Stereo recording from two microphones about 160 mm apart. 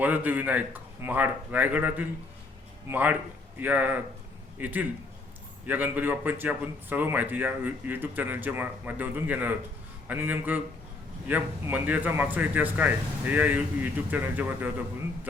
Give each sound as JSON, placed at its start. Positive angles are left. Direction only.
{"t": 0.0, "sound": "speech", "side_deg": -10}